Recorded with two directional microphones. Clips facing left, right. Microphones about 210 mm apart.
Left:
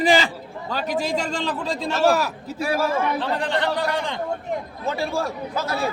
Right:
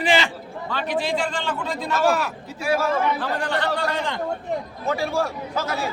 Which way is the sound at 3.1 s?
20° left (ahead or behind).